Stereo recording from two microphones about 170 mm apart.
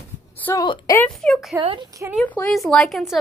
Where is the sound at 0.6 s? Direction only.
20° left (ahead or behind).